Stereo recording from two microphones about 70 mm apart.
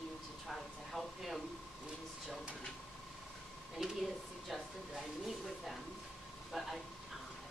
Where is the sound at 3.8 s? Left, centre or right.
Centre.